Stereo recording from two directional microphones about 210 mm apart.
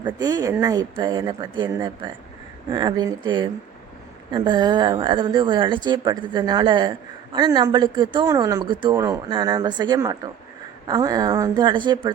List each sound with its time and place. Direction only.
0.0 s speech: 20° right (ahead or behind)